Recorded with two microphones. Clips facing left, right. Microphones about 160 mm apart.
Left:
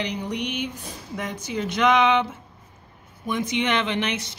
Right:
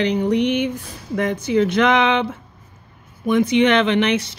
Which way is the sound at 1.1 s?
60° right (ahead or behind).